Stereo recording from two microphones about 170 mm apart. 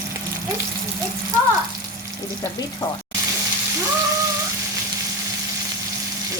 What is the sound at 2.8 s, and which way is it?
Speech, 30° left (ahead or behind).